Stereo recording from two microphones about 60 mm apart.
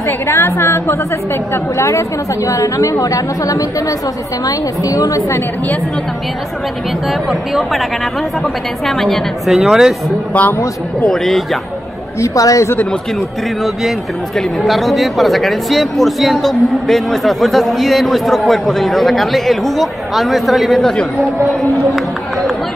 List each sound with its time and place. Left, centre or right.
0.3 s a woman's voice: left
1.5 s a woman's voice: left
7.1 s speech: centre
8.8 s speech: centre
12.2 s a woman's voice: left
13.8 s speech: centre
20.8 s speech: centre